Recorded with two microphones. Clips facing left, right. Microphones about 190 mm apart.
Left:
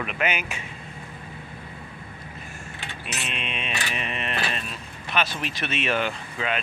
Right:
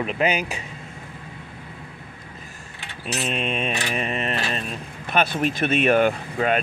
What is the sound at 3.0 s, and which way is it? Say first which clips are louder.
Mantra: right 9 dB; 40° right (ahead or behind).